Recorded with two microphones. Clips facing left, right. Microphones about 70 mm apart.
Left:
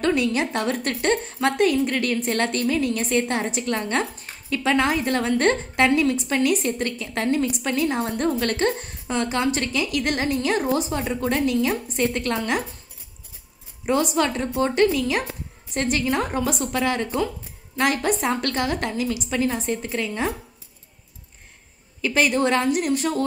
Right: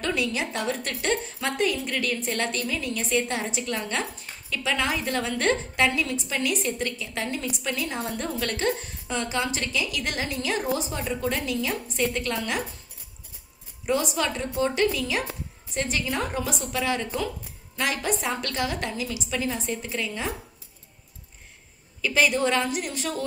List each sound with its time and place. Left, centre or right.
0.0 s a woman's voice: left
13.8 s a woman's voice: left
22.0 s a woman's voice: left